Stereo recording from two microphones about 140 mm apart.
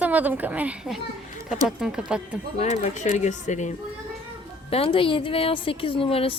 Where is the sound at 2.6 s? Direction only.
50° left (ahead or behind).